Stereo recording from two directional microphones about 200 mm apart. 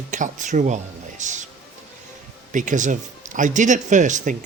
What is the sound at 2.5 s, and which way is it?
Speech, 40° right (ahead or behind).